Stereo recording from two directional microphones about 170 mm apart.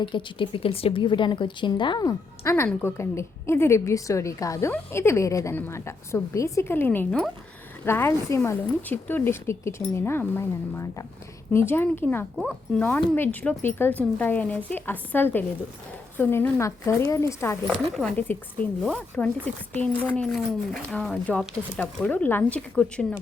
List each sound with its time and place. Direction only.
0.0 s a woman's voice: 30° left (ahead or behind); by 23.0 s 5° left (ahead or behind)